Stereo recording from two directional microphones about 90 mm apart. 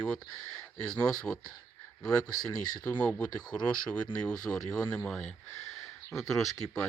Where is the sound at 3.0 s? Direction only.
15° left (ahead or behind).